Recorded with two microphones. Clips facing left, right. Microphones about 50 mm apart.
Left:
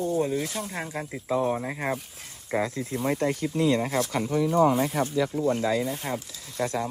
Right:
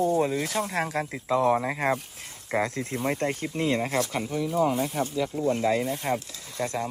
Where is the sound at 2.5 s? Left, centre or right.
Right.